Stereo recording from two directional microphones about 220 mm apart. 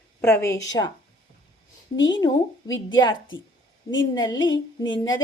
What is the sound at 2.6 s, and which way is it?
Speech, 60° left (ahead or behind).